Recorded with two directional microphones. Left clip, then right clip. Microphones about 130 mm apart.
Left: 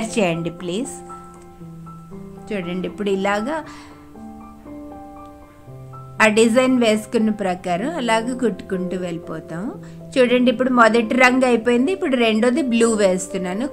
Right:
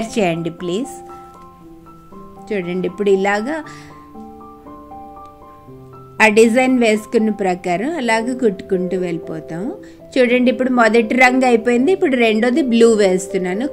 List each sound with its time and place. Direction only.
0.0 s a woman's voice: 15° right (ahead or behind)
2.4 s speech: 15° right (ahead or behind)
6.1 s a woman's voice: 15° right (ahead or behind)